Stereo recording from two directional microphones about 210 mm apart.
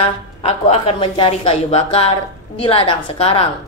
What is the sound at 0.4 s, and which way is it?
A woman's voice, 30° left (ahead or behind).